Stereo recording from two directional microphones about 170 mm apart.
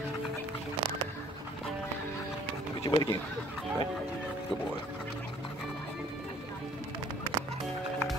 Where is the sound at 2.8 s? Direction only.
20° left (ahead or behind).